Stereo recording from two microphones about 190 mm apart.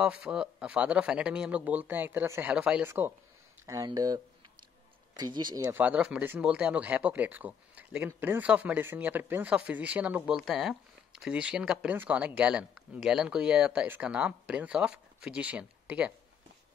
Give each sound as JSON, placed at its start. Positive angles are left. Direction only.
{"t": 0.0, "sound": "speech", "side_deg": -5}
{"t": 5.8, "sound": "speech", "side_deg": -5}